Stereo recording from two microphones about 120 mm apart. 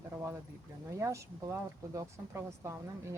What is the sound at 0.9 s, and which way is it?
Speech, 25° right (ahead or behind).